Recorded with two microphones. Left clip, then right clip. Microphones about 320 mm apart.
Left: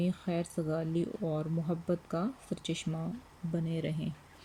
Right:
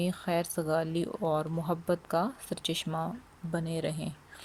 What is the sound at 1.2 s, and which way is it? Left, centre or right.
Speech, right.